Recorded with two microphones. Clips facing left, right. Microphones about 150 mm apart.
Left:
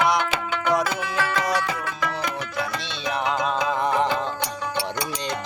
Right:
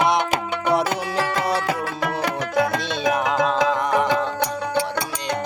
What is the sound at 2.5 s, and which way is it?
Music, 55° right (ahead or behind).